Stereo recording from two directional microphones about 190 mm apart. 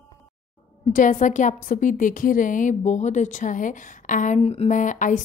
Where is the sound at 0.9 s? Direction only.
45° left (ahead or behind).